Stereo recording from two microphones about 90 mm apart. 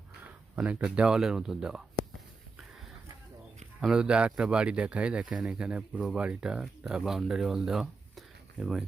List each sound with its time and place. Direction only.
0.5 s speech: 15° right (ahead or behind)
3.8 s speech: 10° right (ahead or behind)